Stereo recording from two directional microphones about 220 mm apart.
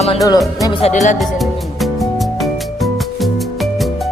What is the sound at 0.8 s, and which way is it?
Speech, 35° left (ahead or behind).